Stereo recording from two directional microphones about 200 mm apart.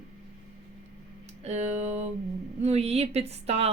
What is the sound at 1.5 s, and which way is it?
Music, 35° right (ahead or behind).